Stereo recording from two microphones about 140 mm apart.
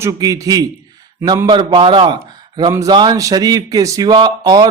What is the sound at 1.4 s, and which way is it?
A man's voice, 35° right (ahead or behind).